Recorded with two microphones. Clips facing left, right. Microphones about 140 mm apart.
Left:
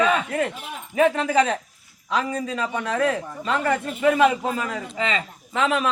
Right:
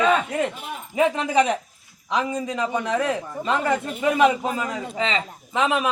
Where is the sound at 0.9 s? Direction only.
20° right (ahead or behind).